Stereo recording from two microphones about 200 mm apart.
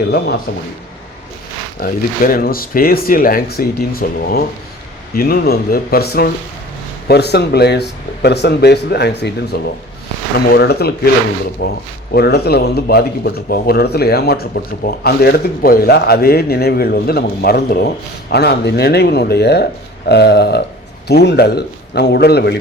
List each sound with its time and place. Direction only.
1.8 s speech: 45° left (ahead or behind)